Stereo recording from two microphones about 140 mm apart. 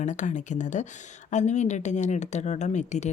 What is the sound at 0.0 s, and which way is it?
Speech, 60° left (ahead or behind).